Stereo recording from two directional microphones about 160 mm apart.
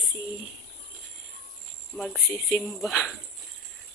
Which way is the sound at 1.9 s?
20° left (ahead or behind).